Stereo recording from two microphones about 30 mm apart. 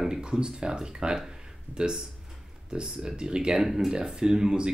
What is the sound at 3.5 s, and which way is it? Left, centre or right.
Speech, centre.